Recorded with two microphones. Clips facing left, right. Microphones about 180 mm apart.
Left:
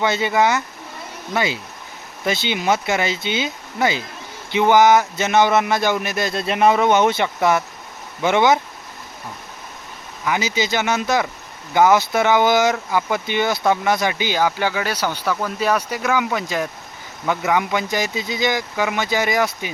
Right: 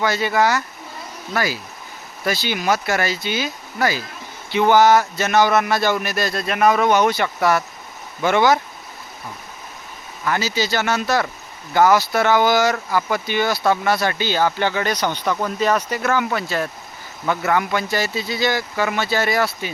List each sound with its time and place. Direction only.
0.0 s speech: 20° left (ahead or behind)
10.2 s speech: 15° left (ahead or behind)